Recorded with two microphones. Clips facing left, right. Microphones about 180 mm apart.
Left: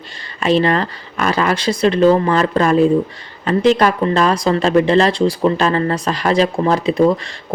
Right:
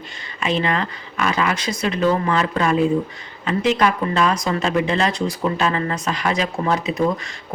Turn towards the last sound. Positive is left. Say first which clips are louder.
# left 7 dB
turn(degrees=30)  # may be behind; listen again after turning